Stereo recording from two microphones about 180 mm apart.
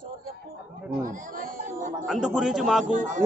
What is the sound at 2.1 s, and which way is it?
Speech, centre (ahead or behind).